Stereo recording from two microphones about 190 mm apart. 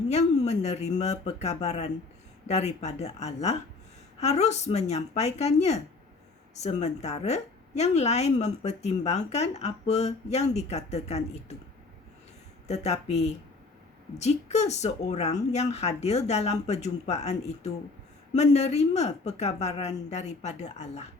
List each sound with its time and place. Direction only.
0.1 s a woman's voice: 35° left (ahead or behind)
12.6 s a woman's voice: 35° left (ahead or behind)